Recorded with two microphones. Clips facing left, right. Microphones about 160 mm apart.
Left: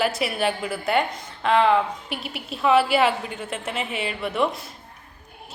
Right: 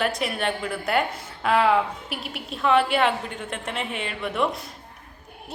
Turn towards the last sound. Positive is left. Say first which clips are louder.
# left 1 dB
turn(degrees=0)  # may be behind; listen again after turning